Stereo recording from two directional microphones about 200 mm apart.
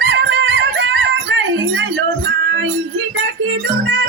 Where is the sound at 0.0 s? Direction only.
70° right (ahead or behind).